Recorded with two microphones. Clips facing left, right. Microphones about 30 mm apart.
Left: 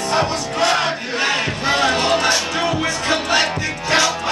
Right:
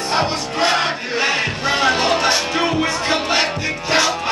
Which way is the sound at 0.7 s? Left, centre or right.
Centre.